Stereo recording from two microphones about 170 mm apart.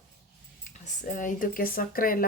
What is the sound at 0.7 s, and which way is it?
Speech, 50° left (ahead or behind).